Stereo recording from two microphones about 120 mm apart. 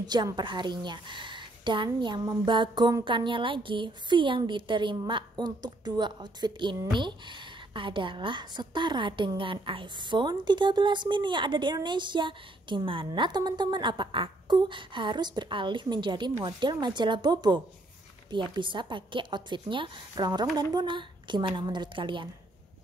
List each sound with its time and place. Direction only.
0.0 s a woman's voice: 35° right (ahead or behind)